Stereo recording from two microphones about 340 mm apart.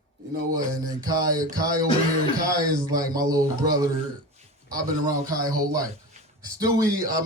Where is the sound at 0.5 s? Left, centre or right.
Centre.